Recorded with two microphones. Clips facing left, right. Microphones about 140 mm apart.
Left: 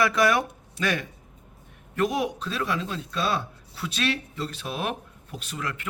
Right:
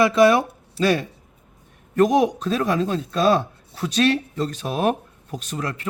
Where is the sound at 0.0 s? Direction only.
25° right (ahead or behind).